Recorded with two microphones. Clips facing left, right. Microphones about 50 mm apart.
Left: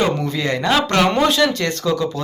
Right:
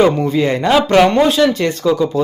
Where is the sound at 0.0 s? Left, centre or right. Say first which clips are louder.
Right 7 dB; centre.